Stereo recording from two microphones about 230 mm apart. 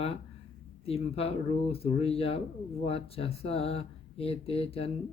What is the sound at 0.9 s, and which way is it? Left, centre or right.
Speech, left.